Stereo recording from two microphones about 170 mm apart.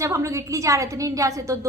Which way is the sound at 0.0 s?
20° right (ahead or behind).